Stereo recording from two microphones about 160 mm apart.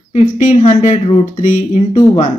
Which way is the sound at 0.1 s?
50° left (ahead or behind).